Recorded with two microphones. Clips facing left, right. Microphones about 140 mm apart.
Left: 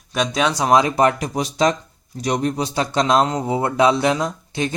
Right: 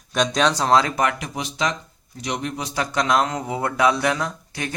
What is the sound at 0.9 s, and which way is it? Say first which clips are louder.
Speech: left 6 dB; 35° left (ahead or behind).